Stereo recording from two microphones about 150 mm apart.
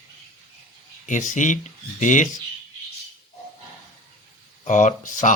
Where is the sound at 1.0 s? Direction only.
55° left (ahead or behind).